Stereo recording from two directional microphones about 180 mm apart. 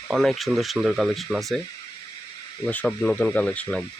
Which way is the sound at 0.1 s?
Centre (ahead or behind).